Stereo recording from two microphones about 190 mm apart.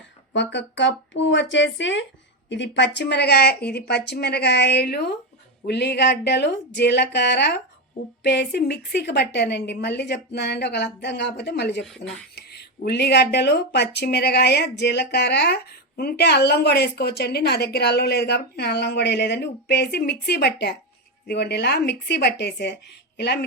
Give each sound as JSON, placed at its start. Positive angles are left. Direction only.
{"t": 0.3, "sound": "speech", "side_deg": 70}
{"t": 11.8, "sound": "speech", "side_deg": 0}
{"t": 12.5, "sound": "speech", "side_deg": 60}